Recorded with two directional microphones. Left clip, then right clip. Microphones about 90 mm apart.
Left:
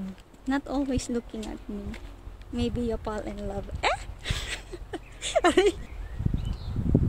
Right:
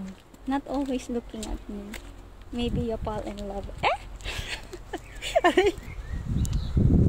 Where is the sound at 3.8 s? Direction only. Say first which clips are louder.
Right 1 dB; 35° left (ahead or behind).